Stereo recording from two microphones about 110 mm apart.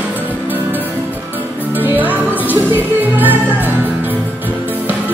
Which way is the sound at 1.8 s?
15° right (ahead or behind).